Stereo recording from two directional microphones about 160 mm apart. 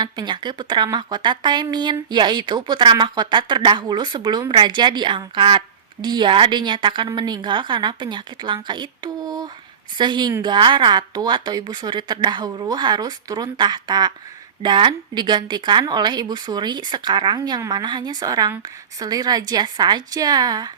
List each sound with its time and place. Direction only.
0.0 s speech: 25° right (ahead or behind)